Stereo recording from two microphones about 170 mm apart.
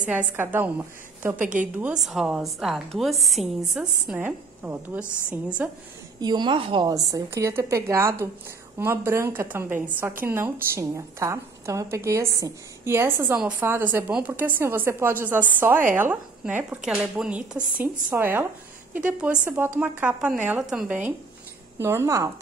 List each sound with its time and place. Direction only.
0.0 s a woman's voice: 10° right (ahead or behind)
1.4 s a woman's voice: 50° right (ahead or behind)
1.8 s a woman's voice: 5° right (ahead or behind)
6.2 s a woman's voice: 25° right (ahead or behind)